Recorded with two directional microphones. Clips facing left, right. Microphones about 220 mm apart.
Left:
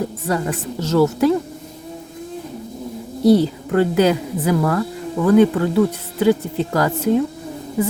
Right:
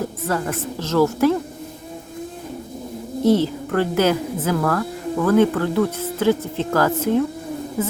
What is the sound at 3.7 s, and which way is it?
Speech, 15° left (ahead or behind).